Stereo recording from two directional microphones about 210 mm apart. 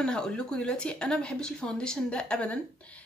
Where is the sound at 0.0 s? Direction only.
5° left (ahead or behind).